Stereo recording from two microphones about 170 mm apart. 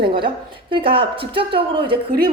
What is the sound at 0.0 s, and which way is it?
A woman's voice, 30° right (ahead or behind).